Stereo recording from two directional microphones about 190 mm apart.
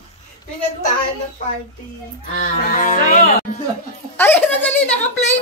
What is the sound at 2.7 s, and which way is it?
Speech, 45° left (ahead or behind).